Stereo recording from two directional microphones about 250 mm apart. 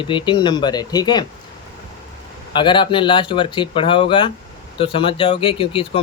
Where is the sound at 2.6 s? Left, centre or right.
Centre.